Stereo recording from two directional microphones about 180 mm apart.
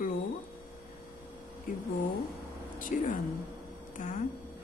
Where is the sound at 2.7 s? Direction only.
45° left (ahead or behind).